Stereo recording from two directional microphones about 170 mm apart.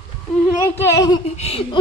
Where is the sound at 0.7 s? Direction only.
20° left (ahead or behind).